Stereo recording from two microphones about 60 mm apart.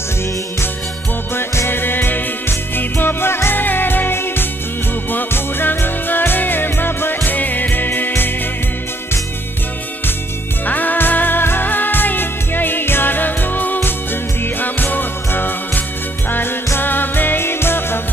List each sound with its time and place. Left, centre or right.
1.3 s music: left
10.6 s music: left